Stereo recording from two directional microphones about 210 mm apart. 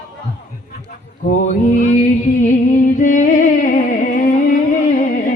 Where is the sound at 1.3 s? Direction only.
35° left (ahead or behind).